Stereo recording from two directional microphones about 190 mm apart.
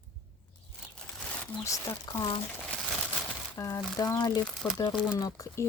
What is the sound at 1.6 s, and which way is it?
Speech, 15° left (ahead or behind).